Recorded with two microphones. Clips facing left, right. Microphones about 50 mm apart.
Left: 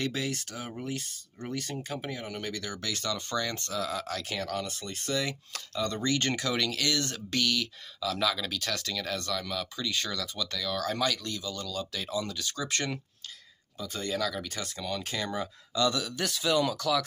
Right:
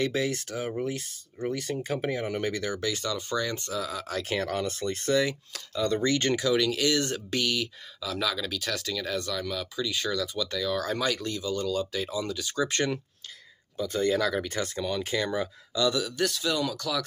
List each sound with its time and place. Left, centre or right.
0.0 s speech: right
1.8 s speech: right; by 4.0 s centre
4.1 s speech: right
6.4 s speech: centre
12.5 s speech: right
13.7 s speech: centre
14.0 s speech: right
14.8 s speech: centre
15.8 s speech: centre